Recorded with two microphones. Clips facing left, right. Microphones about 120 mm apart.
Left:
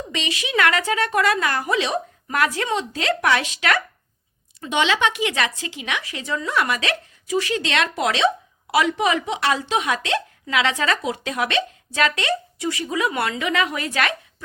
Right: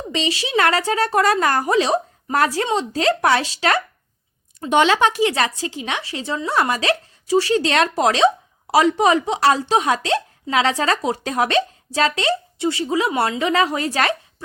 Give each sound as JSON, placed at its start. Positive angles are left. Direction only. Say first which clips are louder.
{"t": 0.1, "sound": "a woman's voice", "louder": "right 6 dB", "side_deg": -30}
{"t": 4.6, "sound": "a woman's voice", "louder": "right 5 dB", "side_deg": -45}